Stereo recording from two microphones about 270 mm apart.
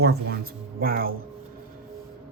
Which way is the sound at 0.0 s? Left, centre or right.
Right.